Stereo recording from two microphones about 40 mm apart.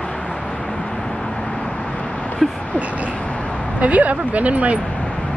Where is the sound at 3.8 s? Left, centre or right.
Right.